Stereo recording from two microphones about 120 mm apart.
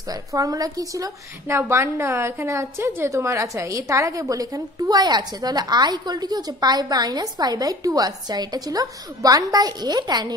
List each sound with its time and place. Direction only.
0.1 s a woman's voice: 30° right (ahead or behind)